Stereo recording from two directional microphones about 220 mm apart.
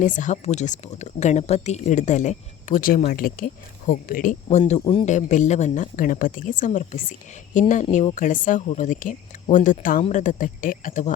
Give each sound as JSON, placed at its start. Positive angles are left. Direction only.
{"t": 0.0, "sound": "speech", "side_deg": 35}